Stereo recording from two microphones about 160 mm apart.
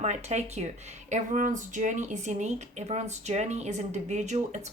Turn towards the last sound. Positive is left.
turn(degrees=-45)  # may be behind; listen again after turning